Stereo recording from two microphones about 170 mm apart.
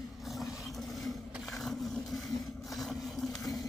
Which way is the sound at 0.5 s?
Centre (ahead or behind).